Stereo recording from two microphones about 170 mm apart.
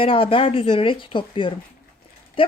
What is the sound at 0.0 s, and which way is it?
Speech, 30° left (ahead or behind).